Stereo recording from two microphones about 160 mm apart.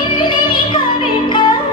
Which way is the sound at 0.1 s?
30° left (ahead or behind).